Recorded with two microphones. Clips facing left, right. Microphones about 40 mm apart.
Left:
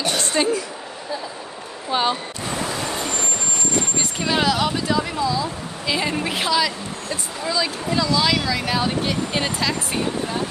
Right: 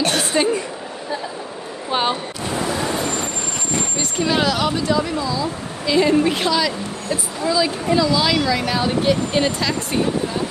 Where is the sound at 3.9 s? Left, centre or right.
Centre.